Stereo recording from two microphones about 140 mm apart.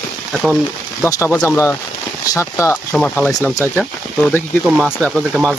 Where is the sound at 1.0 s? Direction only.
20° left (ahead or behind).